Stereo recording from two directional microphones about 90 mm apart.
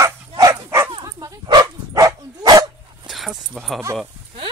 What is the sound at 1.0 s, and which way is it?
Dog, 40° right (ahead or behind).